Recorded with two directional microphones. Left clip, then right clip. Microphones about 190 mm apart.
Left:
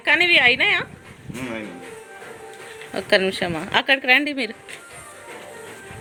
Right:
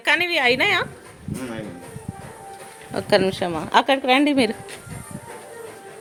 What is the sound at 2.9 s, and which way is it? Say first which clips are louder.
A woman's voice: even; 15° right (ahead or behind).